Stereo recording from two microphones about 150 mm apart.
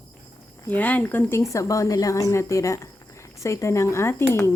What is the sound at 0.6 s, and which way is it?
Speech, 10° left (ahead or behind).